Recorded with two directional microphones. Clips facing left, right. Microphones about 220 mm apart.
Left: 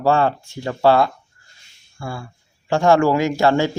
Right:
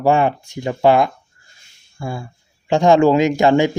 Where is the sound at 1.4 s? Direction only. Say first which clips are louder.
Right 1 dB; 20° right (ahead or behind).